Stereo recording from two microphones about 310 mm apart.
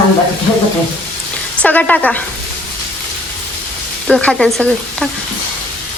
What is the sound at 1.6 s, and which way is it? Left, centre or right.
Stir, centre.